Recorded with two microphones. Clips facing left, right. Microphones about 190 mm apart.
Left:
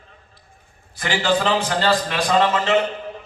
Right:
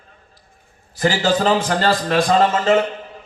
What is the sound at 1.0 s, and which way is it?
A man's voice, 40° right (ahead or behind).